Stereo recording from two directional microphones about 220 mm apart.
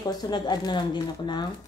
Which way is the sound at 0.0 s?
15° left (ahead or behind).